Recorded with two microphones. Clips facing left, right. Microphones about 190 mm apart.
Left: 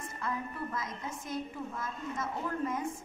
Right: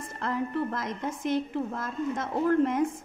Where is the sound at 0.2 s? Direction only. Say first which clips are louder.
Right 9 dB; 80° right.